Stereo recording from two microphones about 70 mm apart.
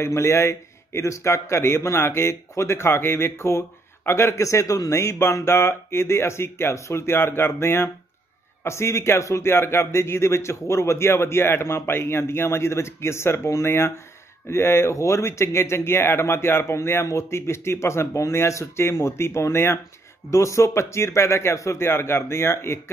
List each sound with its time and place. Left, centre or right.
0.0 s a man's voice: left
20.2 s a man's voice: left